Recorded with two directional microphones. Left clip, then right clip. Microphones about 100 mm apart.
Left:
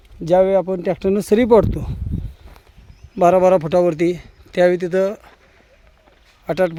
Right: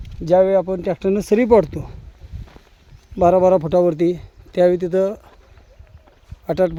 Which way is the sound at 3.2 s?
10° right (ahead or behind).